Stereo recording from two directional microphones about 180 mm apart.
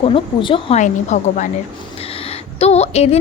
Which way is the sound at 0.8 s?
40° left (ahead or behind).